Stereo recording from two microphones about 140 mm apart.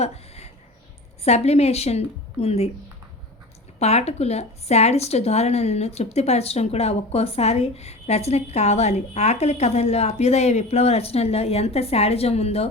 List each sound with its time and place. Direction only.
0.0 s a sound: 50° left (ahead or behind)
1.2 s speech: 50° left (ahead or behind)
3.8 s speech: 50° left (ahead or behind)